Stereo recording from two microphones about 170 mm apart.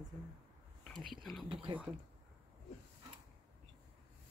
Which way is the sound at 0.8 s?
Centre (ahead or behind).